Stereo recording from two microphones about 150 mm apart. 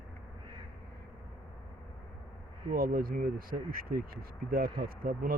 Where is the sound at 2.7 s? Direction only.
75° right (ahead or behind).